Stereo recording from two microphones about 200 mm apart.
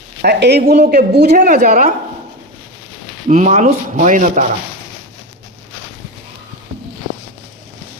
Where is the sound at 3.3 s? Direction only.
35° right (ahead or behind).